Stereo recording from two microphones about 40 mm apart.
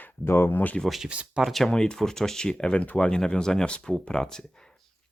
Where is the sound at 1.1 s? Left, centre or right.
Right.